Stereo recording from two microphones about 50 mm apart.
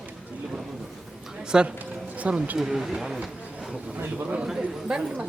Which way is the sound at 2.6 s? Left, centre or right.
Centre.